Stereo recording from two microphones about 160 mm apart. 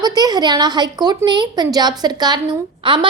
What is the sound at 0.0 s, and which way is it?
A woman's voice, 25° right (ahead or behind).